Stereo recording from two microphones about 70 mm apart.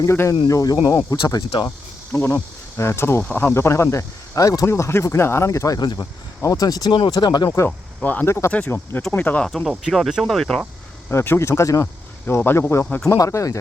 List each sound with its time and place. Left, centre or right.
0.0 s speech: left
0.4 s speech: left
2.1 s speech: left
4.4 s speech: left
4.6 s speech: left
8.0 s speech: left
8.3 s speech: left
9.1 s speech: left
9.5 s speech: centre
11.1 s speech: left
12.2 s speech: left
13.1 s speech: left